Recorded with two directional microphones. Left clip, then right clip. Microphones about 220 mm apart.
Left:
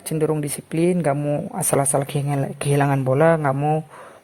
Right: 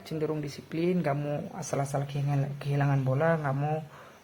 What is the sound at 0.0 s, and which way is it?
Speech, 45° left (ahead or behind).